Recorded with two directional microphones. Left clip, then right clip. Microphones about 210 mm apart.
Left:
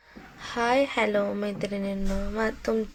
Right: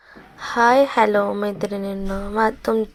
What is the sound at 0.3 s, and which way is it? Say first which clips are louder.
A woman's voice: right 9 dB; 15° right (ahead or behind).